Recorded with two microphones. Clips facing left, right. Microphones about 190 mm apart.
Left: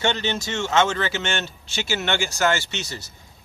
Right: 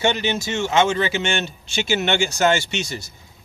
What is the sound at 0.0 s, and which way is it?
Speech, 10° right (ahead or behind).